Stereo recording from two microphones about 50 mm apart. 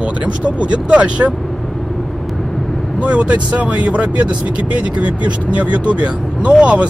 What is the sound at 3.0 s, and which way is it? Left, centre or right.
Speech, right.